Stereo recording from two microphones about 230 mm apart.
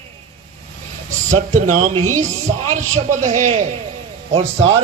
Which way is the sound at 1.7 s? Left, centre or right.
Right.